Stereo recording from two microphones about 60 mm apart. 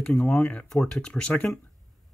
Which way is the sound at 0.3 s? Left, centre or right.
Left.